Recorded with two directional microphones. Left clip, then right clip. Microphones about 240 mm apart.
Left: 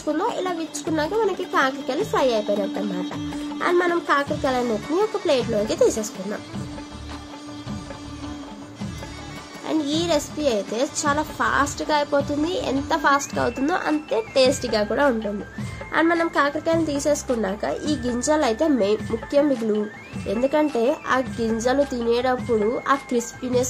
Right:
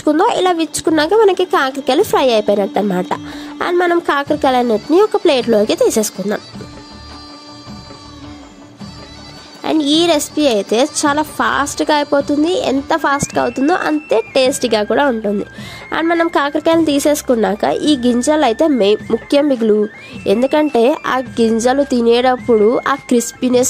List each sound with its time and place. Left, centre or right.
0.1 s a woman's voice: right
9.7 s a woman's voice: right